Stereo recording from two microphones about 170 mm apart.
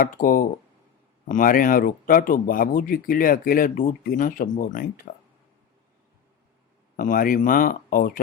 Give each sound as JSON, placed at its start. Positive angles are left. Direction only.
{"t": 0.0, "sound": "speech", "side_deg": 55}
{"t": 6.9, "sound": "speech", "side_deg": 55}